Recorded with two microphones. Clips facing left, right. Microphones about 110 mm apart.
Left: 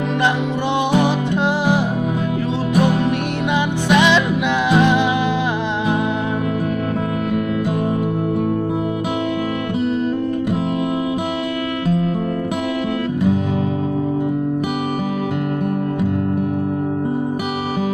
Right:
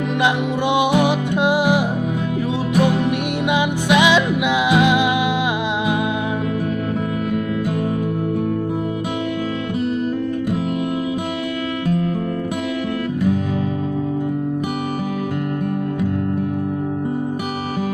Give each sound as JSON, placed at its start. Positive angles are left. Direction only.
{"t": 0.2, "sound": "music", "side_deg": -10}
{"t": 3.5, "sound": "music", "side_deg": -10}